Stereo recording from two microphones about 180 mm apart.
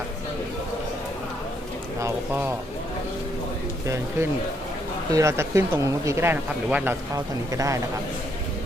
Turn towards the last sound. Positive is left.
turn(degrees=-20)  # may be behind; listen again after turning